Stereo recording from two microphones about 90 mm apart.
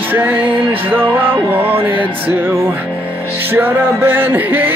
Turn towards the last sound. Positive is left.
turn(degrees=-20)  # may be behind; listen again after turning